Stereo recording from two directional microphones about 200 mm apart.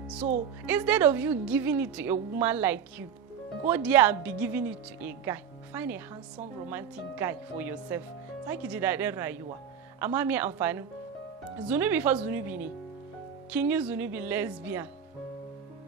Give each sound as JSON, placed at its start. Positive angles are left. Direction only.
{"t": 0.2, "sound": "a woman's voice", "side_deg": -40}
{"t": 0.7, "sound": "a woman's voice", "side_deg": -10}